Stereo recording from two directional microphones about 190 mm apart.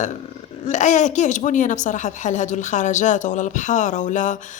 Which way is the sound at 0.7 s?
40° left (ahead or behind).